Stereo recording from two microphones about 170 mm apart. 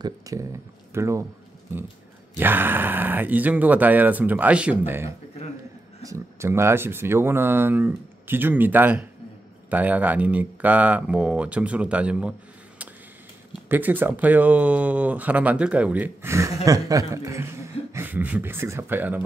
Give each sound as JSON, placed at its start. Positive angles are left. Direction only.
{"t": 0.0, "sound": "speech", "side_deg": -20}
{"t": 2.3, "sound": "speech", "side_deg": -10}